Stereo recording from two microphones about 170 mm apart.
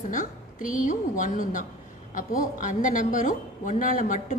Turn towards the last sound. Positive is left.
turn(degrees=50)  # may be behind; listen again after turning